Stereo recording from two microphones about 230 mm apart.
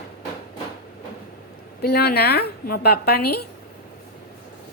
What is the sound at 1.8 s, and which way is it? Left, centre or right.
A woman's voice, left.